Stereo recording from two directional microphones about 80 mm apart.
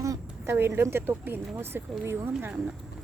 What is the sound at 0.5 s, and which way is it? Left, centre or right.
Speech, right.